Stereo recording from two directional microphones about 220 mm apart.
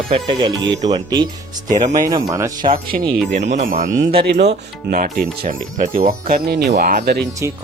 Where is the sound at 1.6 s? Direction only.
35° right (ahead or behind).